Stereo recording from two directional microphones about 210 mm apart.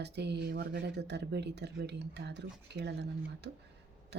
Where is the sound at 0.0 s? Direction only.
55° right (ahead or behind).